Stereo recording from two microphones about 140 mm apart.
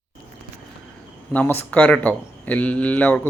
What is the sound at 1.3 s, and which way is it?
A man's voice, 15° left (ahead or behind).